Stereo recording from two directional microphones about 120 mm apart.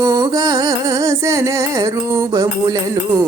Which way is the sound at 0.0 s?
30° right (ahead or behind).